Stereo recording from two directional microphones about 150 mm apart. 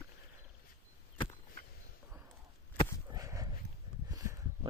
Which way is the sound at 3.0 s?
25° right (ahead or behind).